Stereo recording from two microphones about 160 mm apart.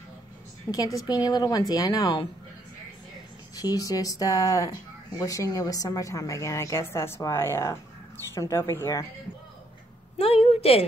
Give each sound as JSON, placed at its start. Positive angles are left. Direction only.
{"t": 0.7, "sound": "speech", "side_deg": 15}
{"t": 3.6, "sound": "speech", "side_deg": 25}
{"t": 10.1, "sound": "a sound", "side_deg": 35}